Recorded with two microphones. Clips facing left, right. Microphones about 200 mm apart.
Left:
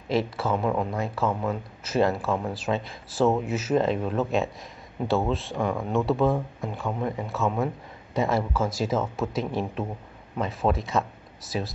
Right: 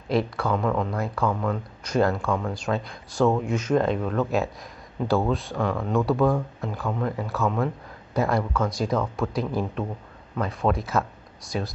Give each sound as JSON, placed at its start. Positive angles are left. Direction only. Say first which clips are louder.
{"t": 0.1, "sound": "speech", "louder": "right 1 dB", "side_deg": 0}
{"t": 5.6, "sound": "speech", "louder": "right 1 dB", "side_deg": 15}
{"t": 5.9, "sound": "speech", "louder": "right 2 dB", "side_deg": 0}